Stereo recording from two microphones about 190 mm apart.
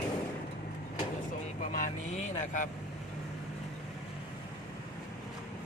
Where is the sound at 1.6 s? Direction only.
45° left (ahead or behind).